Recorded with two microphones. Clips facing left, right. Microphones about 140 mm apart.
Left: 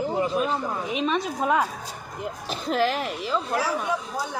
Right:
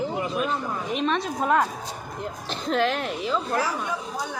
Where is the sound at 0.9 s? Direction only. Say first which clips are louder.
Right 1 dB; 5° left (ahead or behind).